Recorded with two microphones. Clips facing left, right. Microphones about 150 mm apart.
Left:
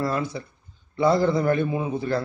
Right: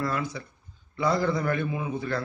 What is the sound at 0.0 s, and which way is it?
Speech, 30° left (ahead or behind).